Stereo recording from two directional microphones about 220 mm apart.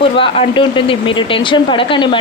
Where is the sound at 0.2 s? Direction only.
25° left (ahead or behind).